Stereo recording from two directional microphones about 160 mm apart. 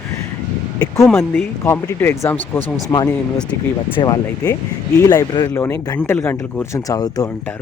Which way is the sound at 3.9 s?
25° left (ahead or behind).